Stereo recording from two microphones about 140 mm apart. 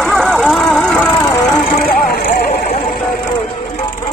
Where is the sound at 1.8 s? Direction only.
90° left.